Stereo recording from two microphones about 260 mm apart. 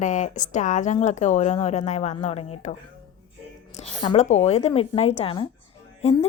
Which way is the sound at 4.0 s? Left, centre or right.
Left.